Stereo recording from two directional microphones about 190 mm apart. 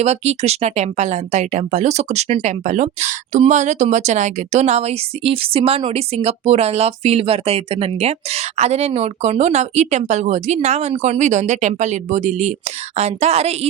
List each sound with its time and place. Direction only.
0.0 s speech: 35° right (ahead or behind)